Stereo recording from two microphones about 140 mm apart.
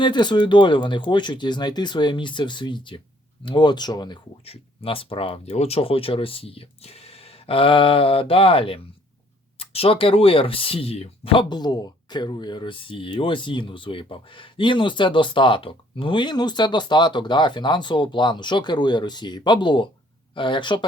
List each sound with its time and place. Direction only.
0.0 s speech: 30° left (ahead or behind)
4.4 s speech: 45° left (ahead or behind)